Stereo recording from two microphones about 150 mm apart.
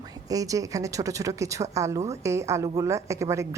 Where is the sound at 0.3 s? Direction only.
25° right (ahead or behind).